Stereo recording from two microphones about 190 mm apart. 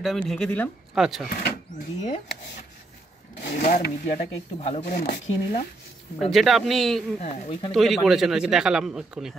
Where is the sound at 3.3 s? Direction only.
55° left (ahead or behind).